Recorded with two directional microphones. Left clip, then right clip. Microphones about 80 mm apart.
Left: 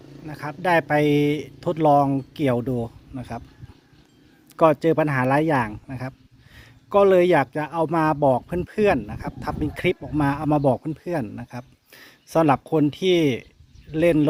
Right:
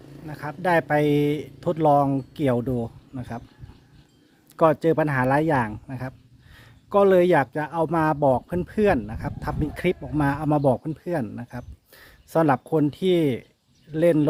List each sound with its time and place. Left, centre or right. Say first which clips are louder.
0.0 s a sound: left 1 dB; right
0.3 s speech: left 1 dB; centre
4.5 s speech: left 2 dB; centre